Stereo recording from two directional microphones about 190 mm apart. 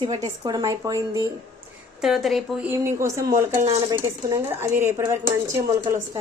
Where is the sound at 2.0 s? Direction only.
Centre (ahead or behind).